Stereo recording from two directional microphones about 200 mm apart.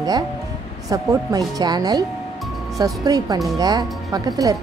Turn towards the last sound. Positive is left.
turn(degrees=-20)  # may be behind; listen again after turning